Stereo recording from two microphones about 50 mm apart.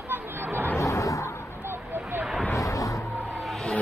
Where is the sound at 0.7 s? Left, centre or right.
Left.